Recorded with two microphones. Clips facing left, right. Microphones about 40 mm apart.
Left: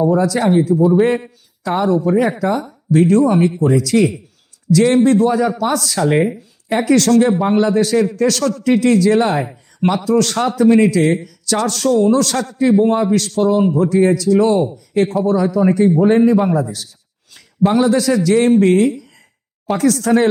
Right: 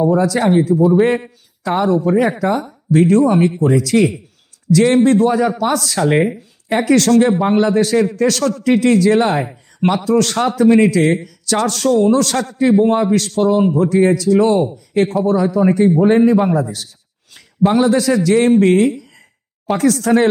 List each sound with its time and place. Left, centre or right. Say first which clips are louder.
0.0 s speech: even; right
15.3 s a man's voice: even; right
17.6 s a man's voice: even; centre
17.8 s speech: even; right